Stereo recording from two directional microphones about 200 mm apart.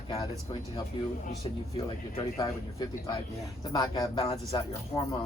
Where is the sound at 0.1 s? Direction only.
25° left (ahead or behind).